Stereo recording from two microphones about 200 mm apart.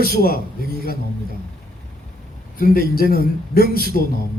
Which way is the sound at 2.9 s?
50° left (ahead or behind).